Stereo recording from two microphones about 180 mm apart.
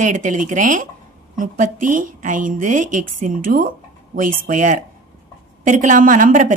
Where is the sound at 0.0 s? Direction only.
45° right (ahead or behind).